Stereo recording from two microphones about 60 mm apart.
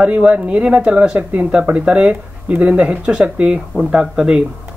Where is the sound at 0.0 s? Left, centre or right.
Centre.